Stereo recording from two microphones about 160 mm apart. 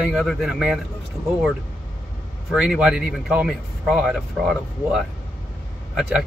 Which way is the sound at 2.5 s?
5° right (ahead or behind).